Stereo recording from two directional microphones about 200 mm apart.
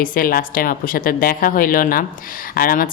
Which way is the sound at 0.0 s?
45° left (ahead or behind).